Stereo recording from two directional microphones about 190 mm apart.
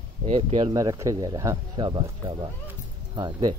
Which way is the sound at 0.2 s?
30° right (ahead or behind).